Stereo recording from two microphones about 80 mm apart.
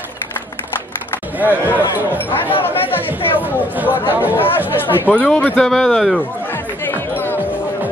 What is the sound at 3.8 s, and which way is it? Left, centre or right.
Speech, left.